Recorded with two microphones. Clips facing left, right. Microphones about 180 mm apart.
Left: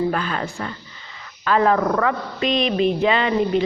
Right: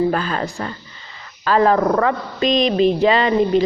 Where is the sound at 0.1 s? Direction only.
35° right (ahead or behind).